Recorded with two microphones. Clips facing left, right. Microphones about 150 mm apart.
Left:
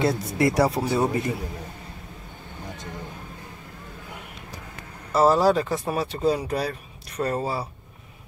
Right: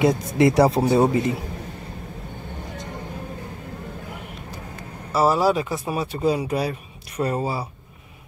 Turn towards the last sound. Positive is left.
turn(degrees=-5)  # may be behind; listen again after turning